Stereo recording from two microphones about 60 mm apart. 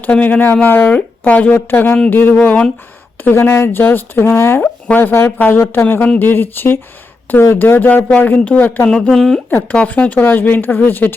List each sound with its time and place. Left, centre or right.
0.0 s speech: left
8.9 s speech: centre
9.5 s speech: left